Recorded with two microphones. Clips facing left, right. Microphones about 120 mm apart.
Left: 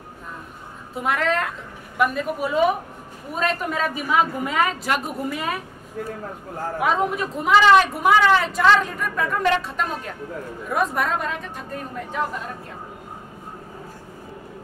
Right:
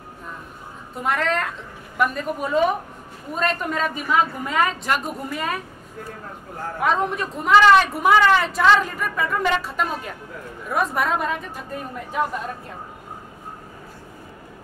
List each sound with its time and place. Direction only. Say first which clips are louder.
0.9 s speech: left 1 dB; centre (ahead or behind)
6.8 s speech: even; 5° left (ahead or behind)